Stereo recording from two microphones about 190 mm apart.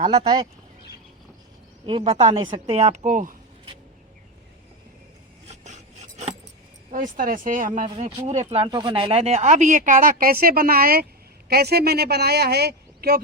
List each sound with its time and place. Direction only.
0.1 s speech: 20° right (ahead or behind)
1.9 s a woman's voice: 30° right (ahead or behind)
5.5 s filing: 40° right (ahead or behind)
6.9 s speech: 45° right (ahead or behind)
7.9 s a woman's voice: 35° right (ahead or behind); by 13.2 s 55° right (ahead or behind)